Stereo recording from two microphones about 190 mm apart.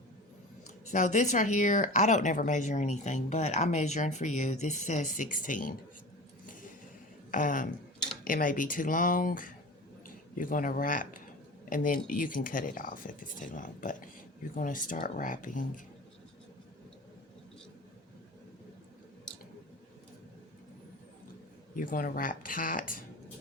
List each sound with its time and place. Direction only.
0.9 s speech: 40° left (ahead or behind)
6.4 s a sound: 45° left (ahead or behind)
7.3 s speech: 45° left (ahead or behind)
21.8 s speech: 50° left (ahead or behind)